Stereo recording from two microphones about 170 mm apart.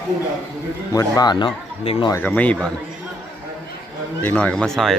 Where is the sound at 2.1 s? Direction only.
10° left (ahead or behind).